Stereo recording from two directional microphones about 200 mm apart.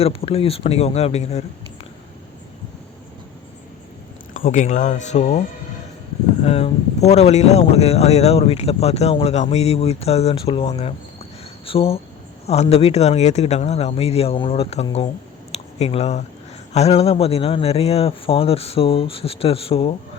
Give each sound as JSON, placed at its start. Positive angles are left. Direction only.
{"t": 0.0, "sound": "speech", "side_deg": 30}
{"t": 4.4, "sound": "speech", "side_deg": 40}
{"t": 6.4, "sound": "speech", "side_deg": 30}
{"t": 15.5, "sound": "a sound", "side_deg": 30}
{"t": 16.7, "sound": "speech", "side_deg": 30}